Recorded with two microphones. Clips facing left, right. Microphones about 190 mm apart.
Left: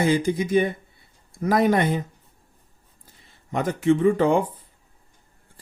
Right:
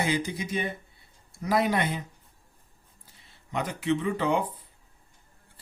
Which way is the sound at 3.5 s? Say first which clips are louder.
Left 7 dB; 50° left (ahead or behind).